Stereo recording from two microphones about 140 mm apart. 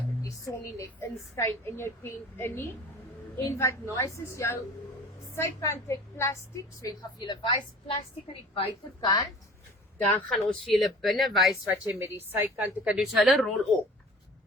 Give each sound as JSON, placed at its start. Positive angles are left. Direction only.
{"t": 0.2, "sound": "a woman's voice", "side_deg": 20}
{"t": 6.8, "sound": "a woman's voice", "side_deg": 30}
{"t": 10.1, "sound": "speech", "side_deg": 10}
{"t": 10.3, "sound": "speech", "side_deg": 0}
{"t": 11.9, "sound": "a woman's voice", "side_deg": -15}